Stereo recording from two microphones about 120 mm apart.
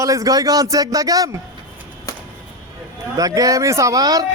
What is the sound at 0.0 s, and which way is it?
A man's voice, 30° right (ahead or behind).